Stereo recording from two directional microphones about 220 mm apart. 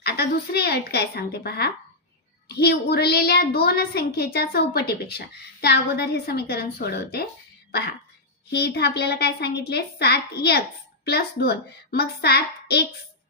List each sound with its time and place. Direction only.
0.0 s a woman's voice: 45° left (ahead or behind)
8.4 s a woman's voice: 45° left (ahead or behind)